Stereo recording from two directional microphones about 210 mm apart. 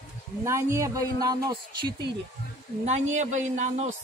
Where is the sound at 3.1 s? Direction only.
35° right (ahead or behind).